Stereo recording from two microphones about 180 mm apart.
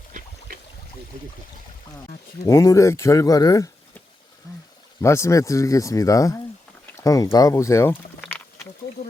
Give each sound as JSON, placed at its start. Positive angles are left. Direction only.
{"t": 0.1, "sound": "a sound", "side_deg": -50}
{"t": 2.5, "sound": "speech", "side_deg": 15}
{"t": 4.9, "sound": "speech", "side_deg": 15}